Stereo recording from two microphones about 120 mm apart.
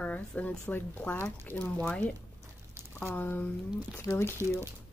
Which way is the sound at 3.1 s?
15° left (ahead or behind).